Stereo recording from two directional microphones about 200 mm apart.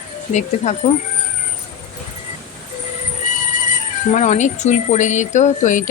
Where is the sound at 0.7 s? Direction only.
35° left (ahead or behind).